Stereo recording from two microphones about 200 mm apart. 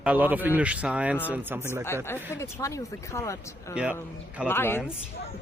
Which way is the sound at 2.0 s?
10° left (ahead or behind).